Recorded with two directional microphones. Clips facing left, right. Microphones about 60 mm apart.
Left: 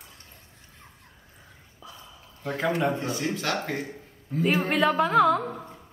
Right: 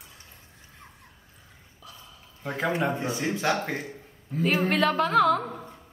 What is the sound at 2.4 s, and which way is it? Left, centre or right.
Speech, centre.